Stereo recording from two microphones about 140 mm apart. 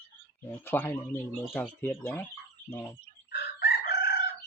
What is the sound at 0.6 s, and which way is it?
Speech, 15° left (ahead or behind).